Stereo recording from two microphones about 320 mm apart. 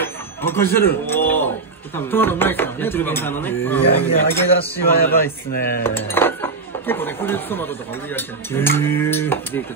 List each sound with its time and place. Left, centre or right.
0.0 s a sound: centre
2.0 s speech: centre
5.5 s cutlery: left
5.9 s speech: centre